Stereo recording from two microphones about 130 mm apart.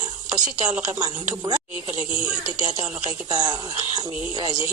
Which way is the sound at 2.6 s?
30° right (ahead or behind).